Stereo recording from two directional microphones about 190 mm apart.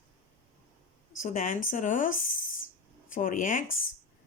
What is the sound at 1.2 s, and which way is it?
Speech, 45° left (ahead or behind).